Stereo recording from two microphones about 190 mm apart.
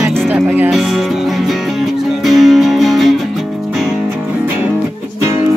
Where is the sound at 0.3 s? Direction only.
10° right (ahead or behind).